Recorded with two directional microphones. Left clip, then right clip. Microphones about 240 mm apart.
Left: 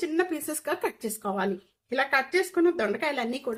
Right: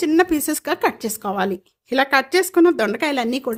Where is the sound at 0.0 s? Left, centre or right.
Right.